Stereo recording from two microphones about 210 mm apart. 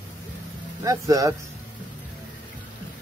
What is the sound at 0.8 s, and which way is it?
Speech, 15° right (ahead or behind).